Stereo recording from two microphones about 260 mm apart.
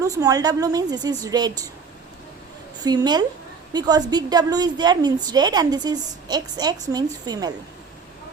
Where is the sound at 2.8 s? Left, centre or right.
Centre.